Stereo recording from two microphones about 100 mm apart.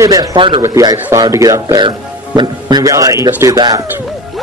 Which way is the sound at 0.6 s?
35° right (ahead or behind).